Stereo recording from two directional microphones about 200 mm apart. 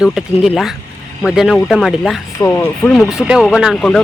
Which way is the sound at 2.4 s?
15° left (ahead or behind).